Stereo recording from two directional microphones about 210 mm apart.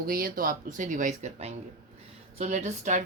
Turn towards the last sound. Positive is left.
turn(degrees=-35)  # may be behind; listen again after turning